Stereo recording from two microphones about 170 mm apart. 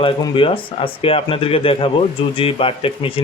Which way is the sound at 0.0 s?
30° left (ahead or behind).